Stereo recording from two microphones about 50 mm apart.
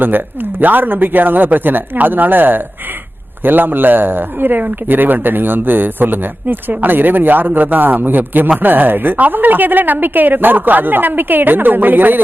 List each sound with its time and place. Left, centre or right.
0.6 s speech: right